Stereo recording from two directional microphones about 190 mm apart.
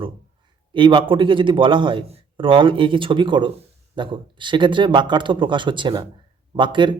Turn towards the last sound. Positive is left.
turn(degrees=-25)  # may be behind; listen again after turning